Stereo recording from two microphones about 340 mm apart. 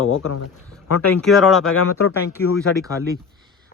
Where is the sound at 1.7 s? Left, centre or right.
Left.